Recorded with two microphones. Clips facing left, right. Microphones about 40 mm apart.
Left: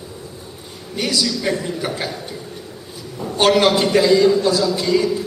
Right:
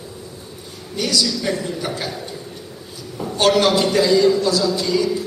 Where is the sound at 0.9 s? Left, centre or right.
Left.